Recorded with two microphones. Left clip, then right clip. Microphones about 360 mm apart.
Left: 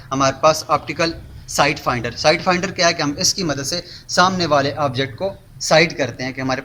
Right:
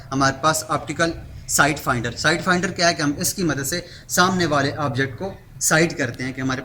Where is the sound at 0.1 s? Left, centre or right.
Centre.